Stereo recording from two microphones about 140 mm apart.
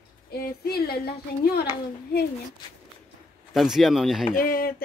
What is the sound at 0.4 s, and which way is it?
Speech, 90° left.